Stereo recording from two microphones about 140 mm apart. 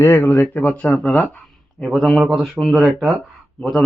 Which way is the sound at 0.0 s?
15° left (ahead or behind).